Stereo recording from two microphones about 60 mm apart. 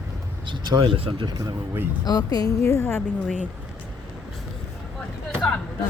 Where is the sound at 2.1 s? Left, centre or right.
Left.